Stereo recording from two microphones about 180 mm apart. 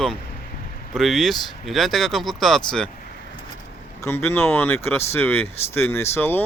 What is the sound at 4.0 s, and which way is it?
Speech, 15° left (ahead or behind).